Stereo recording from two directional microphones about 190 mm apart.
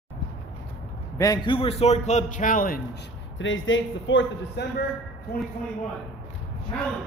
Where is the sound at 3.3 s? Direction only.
80° left.